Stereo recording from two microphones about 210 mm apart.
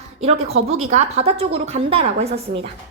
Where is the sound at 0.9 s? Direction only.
30° right (ahead or behind).